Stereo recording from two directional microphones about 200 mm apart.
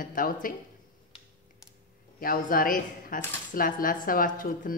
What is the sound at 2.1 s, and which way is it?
A woman's voice, 45° left (ahead or behind).